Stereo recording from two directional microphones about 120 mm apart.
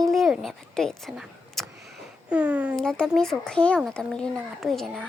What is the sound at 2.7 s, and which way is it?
A child's voice, 5° left (ahead or behind).